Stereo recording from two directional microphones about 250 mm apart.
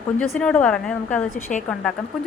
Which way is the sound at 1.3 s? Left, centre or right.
Left.